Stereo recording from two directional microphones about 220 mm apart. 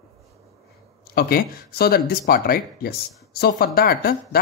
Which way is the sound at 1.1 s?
45° left (ahead or behind).